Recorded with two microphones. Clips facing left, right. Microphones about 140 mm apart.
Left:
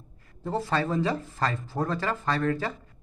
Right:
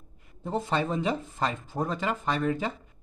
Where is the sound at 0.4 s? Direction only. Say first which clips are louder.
Left 1 dB; 20° right (ahead or behind).